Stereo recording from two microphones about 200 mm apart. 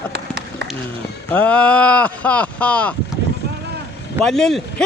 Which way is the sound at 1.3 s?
5° left (ahead or behind).